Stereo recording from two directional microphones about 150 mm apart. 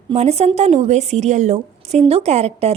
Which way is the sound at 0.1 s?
45° right (ahead or behind).